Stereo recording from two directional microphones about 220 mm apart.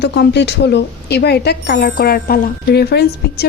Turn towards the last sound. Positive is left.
turn(degrees=45)  # may be behind; listen again after turning